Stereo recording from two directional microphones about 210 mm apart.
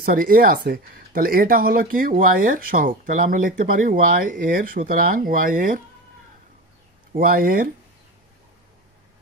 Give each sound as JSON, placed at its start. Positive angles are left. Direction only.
{"t": 0.0, "sound": "speech", "side_deg": -40}
{"t": 7.2, "sound": "speech", "side_deg": -45}